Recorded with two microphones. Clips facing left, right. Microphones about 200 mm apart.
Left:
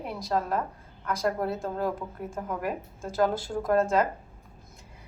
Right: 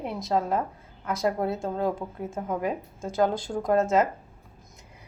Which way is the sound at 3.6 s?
20° right (ahead or behind).